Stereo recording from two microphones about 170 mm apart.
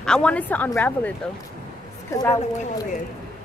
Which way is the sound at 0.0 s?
5° left (ahead or behind).